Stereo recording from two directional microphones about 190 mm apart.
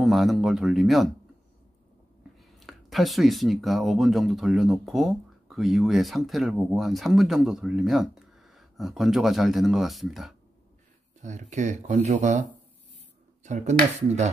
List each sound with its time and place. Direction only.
0.0 s speech: centre (ahead or behind)
2.6 s speech: centre (ahead or behind)
11.1 s speech: 40° right (ahead or behind)